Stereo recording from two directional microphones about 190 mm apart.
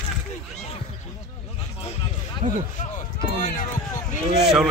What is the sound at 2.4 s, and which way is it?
Speech, 45° right (ahead or behind).